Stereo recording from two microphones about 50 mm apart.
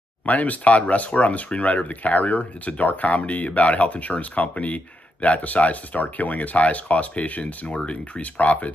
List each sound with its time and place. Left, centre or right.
0.2 s speech: left